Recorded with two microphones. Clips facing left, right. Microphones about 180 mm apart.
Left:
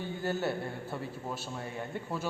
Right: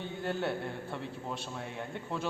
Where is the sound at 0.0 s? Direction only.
5° left (ahead or behind).